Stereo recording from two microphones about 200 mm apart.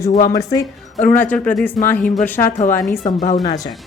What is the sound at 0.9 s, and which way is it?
Speech, 40° left (ahead or behind).